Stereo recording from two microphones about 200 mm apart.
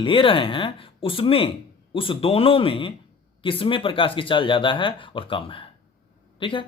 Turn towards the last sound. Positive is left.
turn(degrees=25)  # may be behind; listen again after turning